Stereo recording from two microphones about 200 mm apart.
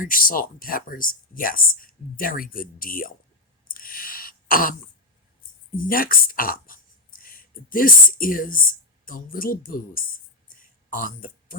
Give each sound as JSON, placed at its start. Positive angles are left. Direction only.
{"t": 0.0, "sound": "speech", "side_deg": 45}
{"t": 3.8, "sound": "throat clearing", "side_deg": 45}
{"t": 5.7, "sound": "speech", "side_deg": 45}